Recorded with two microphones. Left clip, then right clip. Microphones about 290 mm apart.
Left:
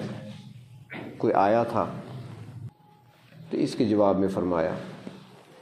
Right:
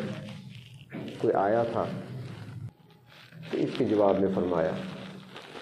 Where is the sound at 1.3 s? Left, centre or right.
Left.